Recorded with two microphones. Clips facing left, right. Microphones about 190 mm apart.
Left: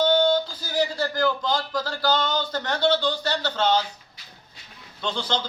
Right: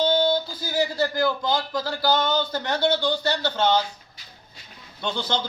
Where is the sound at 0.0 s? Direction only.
10° right (ahead or behind).